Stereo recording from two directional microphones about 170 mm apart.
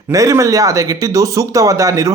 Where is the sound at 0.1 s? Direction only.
20° right (ahead or behind).